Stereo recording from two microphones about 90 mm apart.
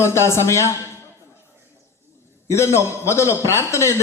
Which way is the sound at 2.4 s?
30° left (ahead or behind).